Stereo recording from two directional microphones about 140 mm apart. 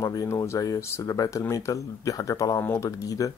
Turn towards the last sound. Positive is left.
turn(degrees=25)  # may be behind; listen again after turning